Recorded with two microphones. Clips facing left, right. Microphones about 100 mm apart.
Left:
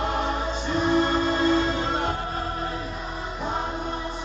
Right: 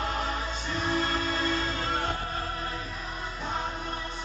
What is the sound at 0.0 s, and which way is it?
Music, 5° left (ahead or behind).